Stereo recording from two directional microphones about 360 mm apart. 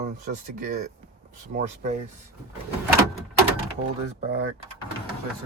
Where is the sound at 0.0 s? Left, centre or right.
Right.